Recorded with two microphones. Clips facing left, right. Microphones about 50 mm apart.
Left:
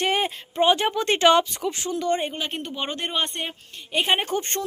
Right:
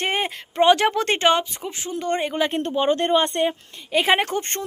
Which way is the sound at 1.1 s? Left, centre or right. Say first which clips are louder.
Left 2 dB; centre.